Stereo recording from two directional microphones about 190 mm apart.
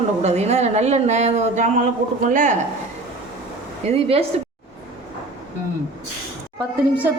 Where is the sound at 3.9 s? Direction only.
30° right (ahead or behind).